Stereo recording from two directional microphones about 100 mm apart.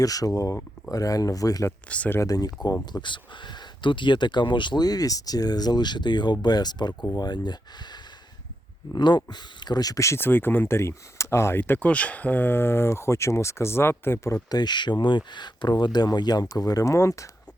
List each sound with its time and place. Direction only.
0.0 s speech: 35° left (ahead or behind)
1.9 s speech: 15° left (ahead or behind)
2.1 s speech: 35° left (ahead or behind)
2.9 s speech: 55° left (ahead or behind)
9.0 s speech: 45° left (ahead or behind); by 14.3 s 25° left (ahead or behind)
14.5 s speech: 45° left (ahead or behind); by 17.2 s 30° left (ahead or behind)